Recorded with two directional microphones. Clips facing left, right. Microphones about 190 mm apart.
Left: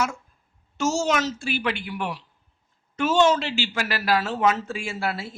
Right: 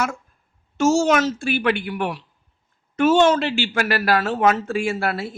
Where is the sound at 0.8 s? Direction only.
55° right (ahead or behind).